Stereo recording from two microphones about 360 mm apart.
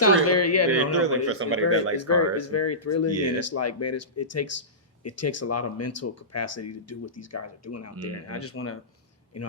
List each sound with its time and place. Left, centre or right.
0.3 s a sound: left
0.9 s speech: right
2.0 s speech: left